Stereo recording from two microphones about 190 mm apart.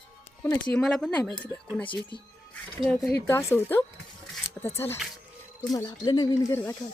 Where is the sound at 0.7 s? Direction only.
5° left (ahead or behind).